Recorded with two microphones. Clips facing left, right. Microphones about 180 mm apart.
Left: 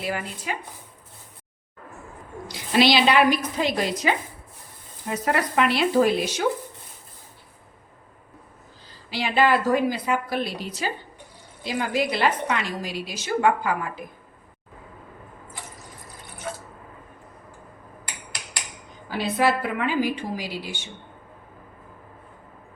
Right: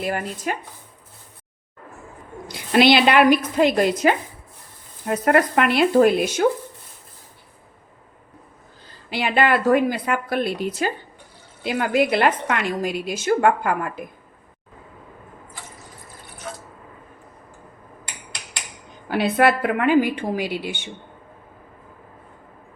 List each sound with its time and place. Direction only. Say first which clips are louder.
0.0 s speech: right 4 dB; 45° right (ahead or behind)
2.5 s a woman's voice: right 4 dB; 55° right (ahead or behind)
9.0 s a woman's voice: right 1 dB; 55° right (ahead or behind)
19.0 s a woman's voice: right 4 dB; 60° right (ahead or behind)